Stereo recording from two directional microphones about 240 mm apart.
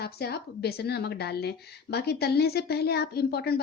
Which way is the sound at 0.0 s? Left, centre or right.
Left.